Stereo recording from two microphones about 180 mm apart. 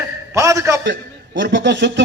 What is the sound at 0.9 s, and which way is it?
A man's voice, 90° right.